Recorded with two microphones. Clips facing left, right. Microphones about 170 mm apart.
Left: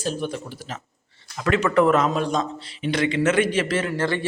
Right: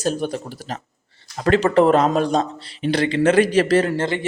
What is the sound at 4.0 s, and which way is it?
Speech, 20° right (ahead or behind).